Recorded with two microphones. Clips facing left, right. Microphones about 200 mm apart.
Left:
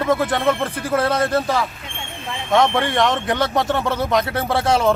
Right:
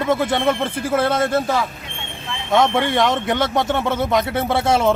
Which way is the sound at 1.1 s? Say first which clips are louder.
Even; 25° right (ahead or behind).